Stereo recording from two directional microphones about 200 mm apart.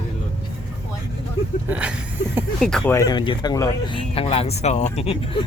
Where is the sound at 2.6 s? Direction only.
5° left (ahead or behind); by 5.4 s 30° left (ahead or behind).